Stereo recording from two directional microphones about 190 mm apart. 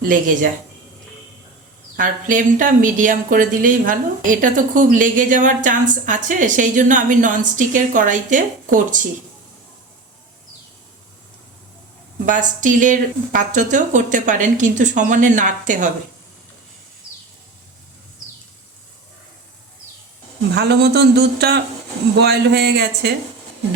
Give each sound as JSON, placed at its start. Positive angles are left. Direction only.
{"t": 0.0, "sound": "speech", "side_deg": -45}
{"t": 2.0, "sound": "speech", "side_deg": -45}
{"t": 12.2, "sound": "speech", "side_deg": -45}
{"t": 20.6, "sound": "a man's voice", "side_deg": -60}